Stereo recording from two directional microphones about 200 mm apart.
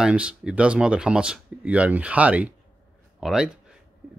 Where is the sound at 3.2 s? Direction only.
5° right (ahead or behind).